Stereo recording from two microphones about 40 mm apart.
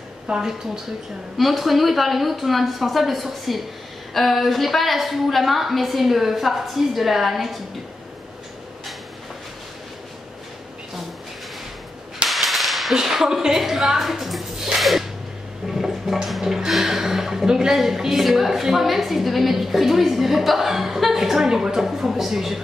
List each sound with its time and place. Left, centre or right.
0.3 s speech: centre
1.4 s a woman's voice: centre
12.3 s whip: centre
12.9 s a woman's voice: centre
13.8 s a sound: centre
16.4 s a woman's voice: centre